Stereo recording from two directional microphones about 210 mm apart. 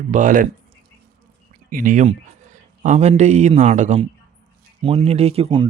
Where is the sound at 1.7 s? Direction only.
40° right (ahead or behind).